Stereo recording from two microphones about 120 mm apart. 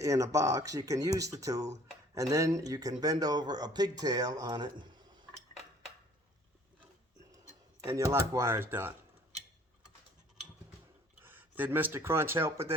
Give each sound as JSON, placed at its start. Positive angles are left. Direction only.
{"t": 0.0, "sound": "speech", "side_deg": -25}
{"t": 7.9, "sound": "speech", "side_deg": -25}
{"t": 11.1, "sound": "speech", "side_deg": -15}